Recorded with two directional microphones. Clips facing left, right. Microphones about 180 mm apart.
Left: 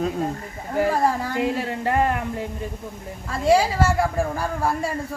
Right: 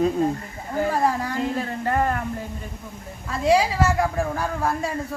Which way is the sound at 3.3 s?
5° left (ahead or behind).